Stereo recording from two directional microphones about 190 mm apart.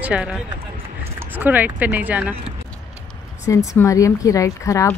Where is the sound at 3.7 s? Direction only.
15° left (ahead or behind).